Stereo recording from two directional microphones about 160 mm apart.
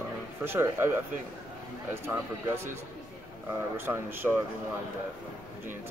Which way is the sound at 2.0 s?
15° right (ahead or behind).